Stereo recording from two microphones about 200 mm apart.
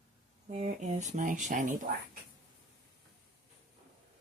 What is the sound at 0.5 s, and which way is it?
Speech, 35° right (ahead or behind).